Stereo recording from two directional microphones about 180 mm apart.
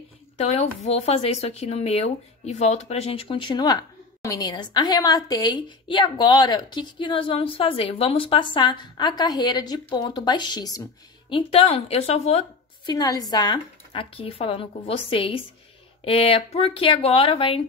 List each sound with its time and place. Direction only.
0.4 s speech: 35° left (ahead or behind)
12.8 s speech: 20° left (ahead or behind)